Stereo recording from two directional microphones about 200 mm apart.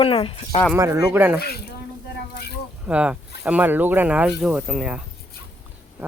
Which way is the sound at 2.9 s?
5° right (ahead or behind).